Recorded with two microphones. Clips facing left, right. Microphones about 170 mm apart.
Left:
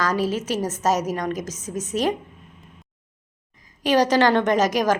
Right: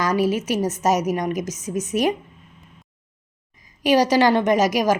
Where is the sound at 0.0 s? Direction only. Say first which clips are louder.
Right 3 dB; 15° right (ahead or behind).